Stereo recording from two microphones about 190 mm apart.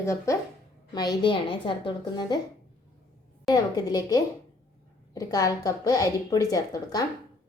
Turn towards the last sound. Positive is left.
turn(degrees=20)  # may be behind; listen again after turning